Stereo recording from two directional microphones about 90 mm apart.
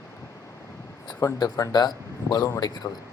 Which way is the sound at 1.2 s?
45° left (ahead or behind).